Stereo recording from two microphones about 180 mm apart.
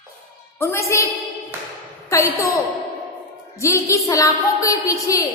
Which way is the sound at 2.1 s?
15° left (ahead or behind).